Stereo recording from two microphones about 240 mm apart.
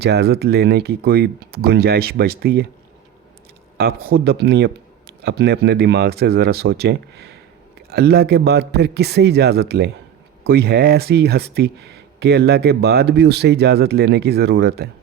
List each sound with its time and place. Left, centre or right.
0.0 s speech: right
4.0 s speech: right